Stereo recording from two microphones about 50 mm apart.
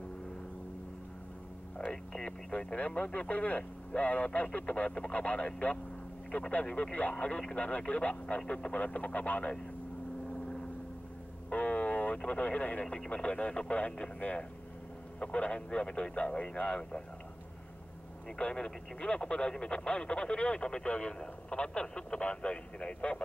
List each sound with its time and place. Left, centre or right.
1.8 s speech: centre
11.5 s vehicle: left
12.3 s speech: left
12.8 s speech: centre
18.4 s speech: centre